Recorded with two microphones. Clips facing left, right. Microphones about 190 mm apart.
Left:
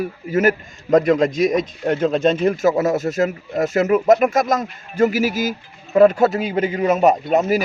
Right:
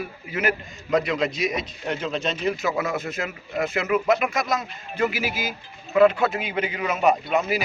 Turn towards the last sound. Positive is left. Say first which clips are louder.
# left 5 dB
turn(degrees=45)  # may be behind; listen again after turning